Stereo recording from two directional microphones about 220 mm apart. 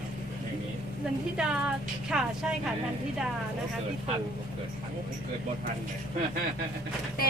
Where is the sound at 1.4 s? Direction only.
5° right (ahead or behind).